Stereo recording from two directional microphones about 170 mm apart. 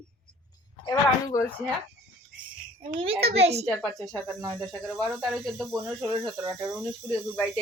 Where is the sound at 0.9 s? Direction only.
20° left (ahead or behind).